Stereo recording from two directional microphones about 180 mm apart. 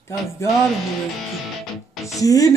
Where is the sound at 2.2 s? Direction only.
20° left (ahead or behind).